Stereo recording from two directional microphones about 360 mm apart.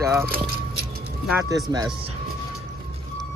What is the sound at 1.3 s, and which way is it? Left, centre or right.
Speech, centre.